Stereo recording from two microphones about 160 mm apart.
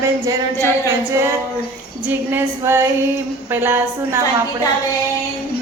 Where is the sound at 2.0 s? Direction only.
15° right (ahead or behind).